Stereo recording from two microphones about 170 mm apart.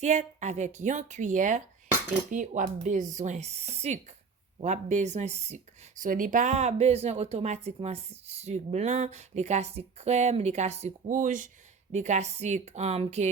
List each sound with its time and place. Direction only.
0.0 s a woman's voice: 45° right (ahead or behind)
6.0 s speech: 50° right (ahead or behind)